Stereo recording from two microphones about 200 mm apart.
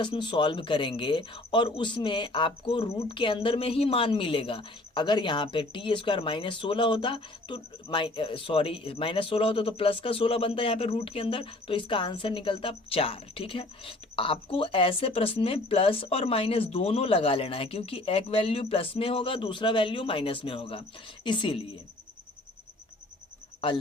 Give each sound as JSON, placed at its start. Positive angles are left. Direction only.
{"t": 0.0, "sound": "speech", "side_deg": 25}